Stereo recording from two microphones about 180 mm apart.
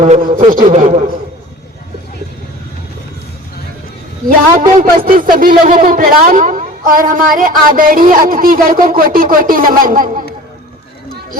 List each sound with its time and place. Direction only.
0.0 s a man's voice: 30° right (ahead or behind)
0.5 s a man's voice: 45° right (ahead or behind)
4.7 s a woman's voice: 50° right (ahead or behind)